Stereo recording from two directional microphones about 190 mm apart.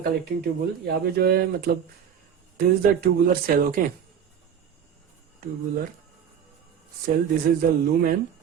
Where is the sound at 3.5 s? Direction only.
50° right (ahead or behind).